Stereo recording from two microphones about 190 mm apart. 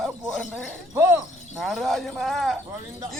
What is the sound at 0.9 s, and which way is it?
Music, 15° right (ahead or behind).